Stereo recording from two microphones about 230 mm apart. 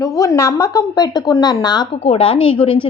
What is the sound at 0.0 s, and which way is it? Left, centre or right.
Speech, centre.